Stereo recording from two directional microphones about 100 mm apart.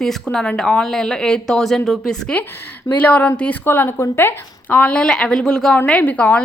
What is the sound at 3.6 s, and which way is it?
A woman's voice, 25° left (ahead or behind).